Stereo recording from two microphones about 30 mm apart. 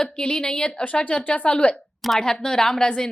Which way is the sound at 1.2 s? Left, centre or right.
Left.